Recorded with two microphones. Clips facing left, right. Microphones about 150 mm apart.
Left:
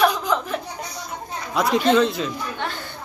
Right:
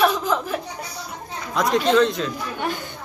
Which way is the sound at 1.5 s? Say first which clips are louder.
Even; 5° left (ahead or behind).